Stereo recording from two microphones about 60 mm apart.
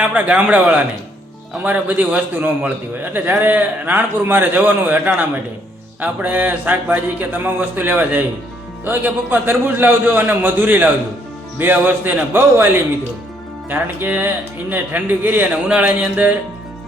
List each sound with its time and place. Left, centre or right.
0.0 s a man's voice: right